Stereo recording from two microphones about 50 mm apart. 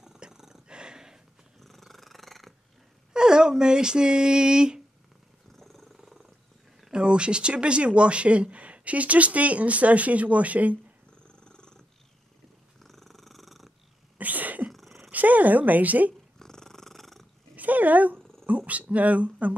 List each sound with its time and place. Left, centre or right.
0.0 s roar: centre
1.6 s cat: centre
3.1 s speech: centre
5.6 s purr: centre
6.9 s speech: centre
11.3 s purr: centre
12.8 s purr: centre
14.1 s sneeze: right
14.7 s a sound: centre
15.0 s a woman's voice: right
16.3 s purr: centre
17.6 s dog: right
18.7 s speech: right